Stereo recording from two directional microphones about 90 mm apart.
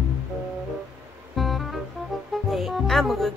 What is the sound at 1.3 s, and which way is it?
Music, centre (ahead or behind).